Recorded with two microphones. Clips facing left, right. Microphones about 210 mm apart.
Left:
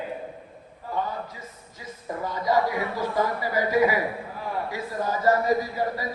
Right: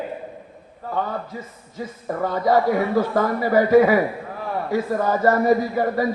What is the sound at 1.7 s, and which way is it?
A man's voice, 60° right (ahead or behind).